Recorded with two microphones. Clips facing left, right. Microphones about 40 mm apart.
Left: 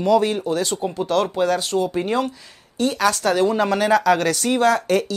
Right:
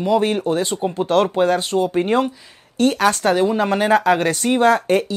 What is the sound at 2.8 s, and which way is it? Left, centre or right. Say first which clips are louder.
Speech: right 3 dB; right.